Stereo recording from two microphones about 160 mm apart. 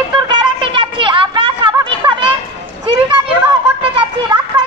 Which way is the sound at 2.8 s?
30° right (ahead or behind).